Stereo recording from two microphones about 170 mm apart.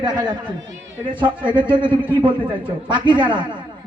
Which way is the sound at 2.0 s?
10° right (ahead or behind).